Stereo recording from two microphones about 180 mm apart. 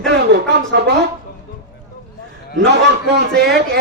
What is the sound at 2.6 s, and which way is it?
Speech, 70° right (ahead or behind).